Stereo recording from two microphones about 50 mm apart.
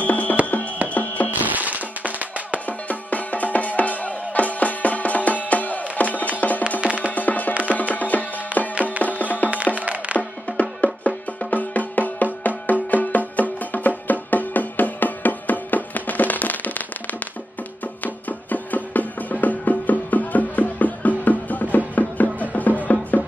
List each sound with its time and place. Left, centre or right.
0.0 s music: left
1.4 s music: right
2.6 s music: left
6.8 s music: right
7.1 s music: left
8.5 s music: right
9.0 s music: left
9.8 s music: right
10.1 s music: left
18.0 s music: left